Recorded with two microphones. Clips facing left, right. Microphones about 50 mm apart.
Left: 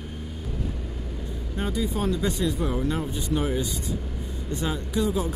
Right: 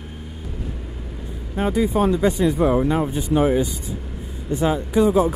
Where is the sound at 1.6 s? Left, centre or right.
Right.